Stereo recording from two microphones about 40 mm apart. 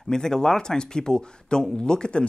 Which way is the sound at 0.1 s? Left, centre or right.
Centre.